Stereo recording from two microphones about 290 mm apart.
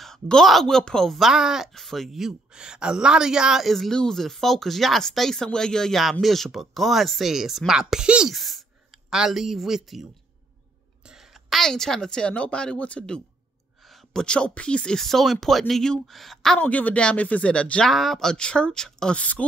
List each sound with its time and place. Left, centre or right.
0.0 s speech: centre
11.1 s a woman's voice: centre